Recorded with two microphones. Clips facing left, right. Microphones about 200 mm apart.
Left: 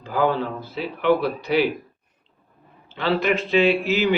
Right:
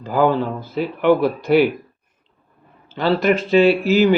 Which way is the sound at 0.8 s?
50° right (ahead or behind).